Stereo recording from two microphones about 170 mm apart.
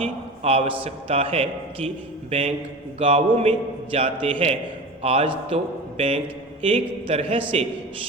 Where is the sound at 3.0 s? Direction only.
35° right (ahead or behind).